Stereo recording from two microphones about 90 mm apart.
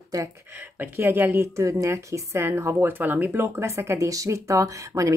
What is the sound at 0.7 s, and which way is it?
A woman's voice, 25° right (ahead or behind).